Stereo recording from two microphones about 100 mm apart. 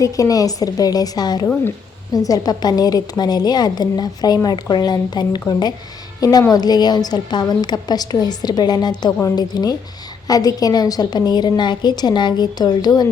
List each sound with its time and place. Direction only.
0.0 s a woman's voice: 35° left (ahead or behind)